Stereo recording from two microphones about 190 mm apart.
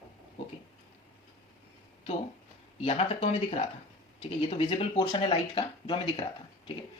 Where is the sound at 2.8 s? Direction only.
30° left (ahead or behind).